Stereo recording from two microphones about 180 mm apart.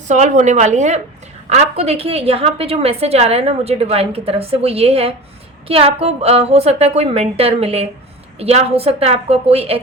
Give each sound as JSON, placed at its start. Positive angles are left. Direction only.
{"t": 0.1, "sound": "a woman's voice", "side_deg": -40}